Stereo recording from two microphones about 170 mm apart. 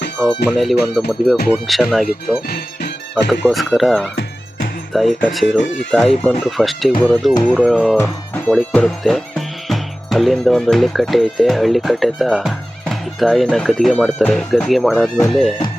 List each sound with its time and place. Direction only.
0.2 s speech: centre (ahead or behind)
2.0 s speech: 65° left (ahead or behind)
3.5 s speech: centre (ahead or behind)
7.9 s speech: 15° left (ahead or behind)
8.7 s speech: centre (ahead or behind)